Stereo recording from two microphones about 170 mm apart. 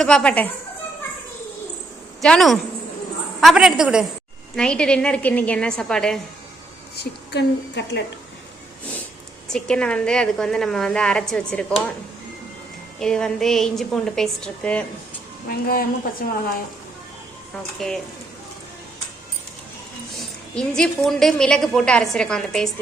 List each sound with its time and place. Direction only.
0.0 s speech: 5° left (ahead or behind)
2.2 s a woman's voice: centre (ahead or behind)
6.9 s a woman's voice: 80° left
9.5 s a woman's voice: 5° left (ahead or behind)
13.0 s a woman's voice: 5° left (ahead or behind)
15.4 s a woman's voice: 60° left (ahead or behind)
17.7 s a woman's voice: 5° left (ahead or behind)
20.6 s a woman's voice: 5° left (ahead or behind)